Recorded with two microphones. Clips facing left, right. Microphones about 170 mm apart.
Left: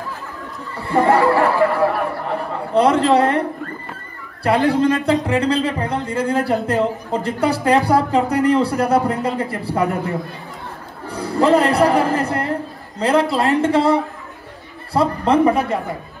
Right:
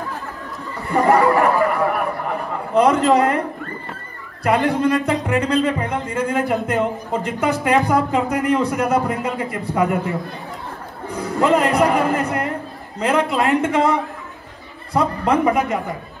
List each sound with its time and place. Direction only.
0.8 s speech: 35° left (ahead or behind)
4.4 s a woman's voice: 35° left (ahead or behind)
11.1 s a man's voice: 35° left (ahead or behind)